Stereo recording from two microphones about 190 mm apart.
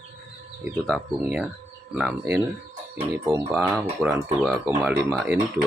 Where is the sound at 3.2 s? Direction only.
20° right (ahead or behind).